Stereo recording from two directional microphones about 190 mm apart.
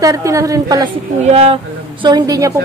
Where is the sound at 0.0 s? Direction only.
15° right (ahead or behind).